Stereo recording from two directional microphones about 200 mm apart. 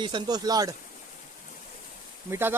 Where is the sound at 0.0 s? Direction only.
20° right (ahead or behind).